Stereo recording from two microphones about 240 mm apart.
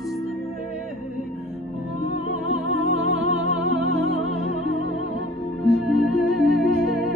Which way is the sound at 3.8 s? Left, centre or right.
Centre.